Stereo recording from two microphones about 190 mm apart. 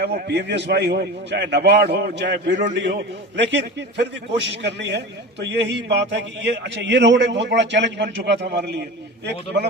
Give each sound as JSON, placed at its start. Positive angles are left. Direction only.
{"t": 0.3, "sound": "a man's voice", "side_deg": -60}